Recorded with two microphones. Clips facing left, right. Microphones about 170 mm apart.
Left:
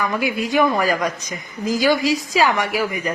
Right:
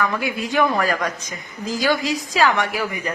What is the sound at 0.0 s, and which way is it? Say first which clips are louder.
A woman's voice: left 2 dB; 10° left (ahead or behind).